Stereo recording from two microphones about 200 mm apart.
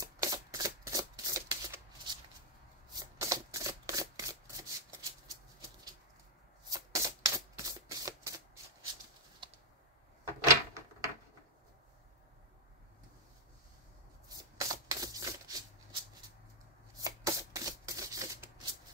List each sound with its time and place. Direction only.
0.0 s shuffling cards: 15° right (ahead or behind)
6.7 s shuffling cards: 15° right (ahead or behind)
9.4 s typing: 25° right (ahead or behind)
10.4 s a sound: 15° right (ahead or behind)
14.6 s sanding: 15° right (ahead or behind)
17.0 s shuffling cards: 15° right (ahead or behind)